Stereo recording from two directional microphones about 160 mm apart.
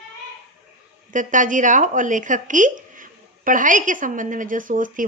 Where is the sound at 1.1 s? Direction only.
55° right (ahead or behind).